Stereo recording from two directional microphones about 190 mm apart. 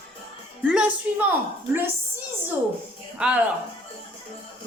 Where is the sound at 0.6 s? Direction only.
5° right (ahead or behind).